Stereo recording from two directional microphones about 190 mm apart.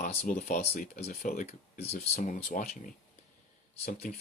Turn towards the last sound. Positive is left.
turn(degrees=50)  # may be behind; listen again after turning